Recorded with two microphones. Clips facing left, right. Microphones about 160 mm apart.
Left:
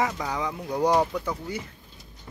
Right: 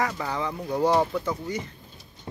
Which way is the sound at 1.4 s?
10° left (ahead or behind).